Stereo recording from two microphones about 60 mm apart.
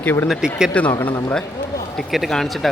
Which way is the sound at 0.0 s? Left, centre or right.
Left.